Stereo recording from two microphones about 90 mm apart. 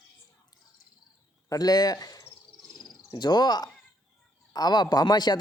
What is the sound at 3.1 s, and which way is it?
Cricket, 55° left (ahead or behind).